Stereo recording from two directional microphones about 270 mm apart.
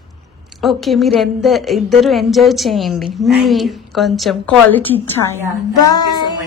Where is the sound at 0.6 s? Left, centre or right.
Centre.